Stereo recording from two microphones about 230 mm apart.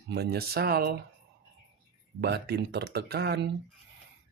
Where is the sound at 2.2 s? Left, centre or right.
Right.